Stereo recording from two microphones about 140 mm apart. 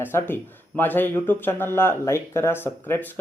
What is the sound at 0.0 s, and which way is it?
Speech, 15° left (ahead or behind).